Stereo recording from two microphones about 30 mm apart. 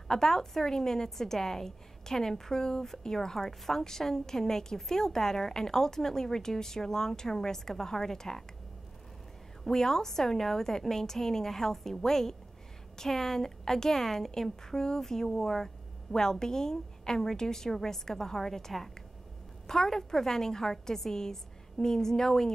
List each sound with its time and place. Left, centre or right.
0.1 s a woman's voice: centre
9.7 s a woman's voice: centre